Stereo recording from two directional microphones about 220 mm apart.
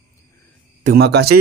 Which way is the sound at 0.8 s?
45° right (ahead or behind).